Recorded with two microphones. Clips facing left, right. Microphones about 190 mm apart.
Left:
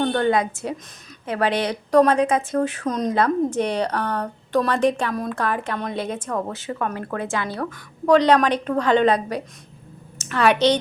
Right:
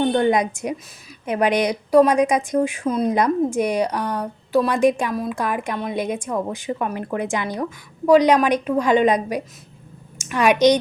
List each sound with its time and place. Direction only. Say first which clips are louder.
0.0 s a woman's voice: right 2 dB; 15° right (ahead or behind)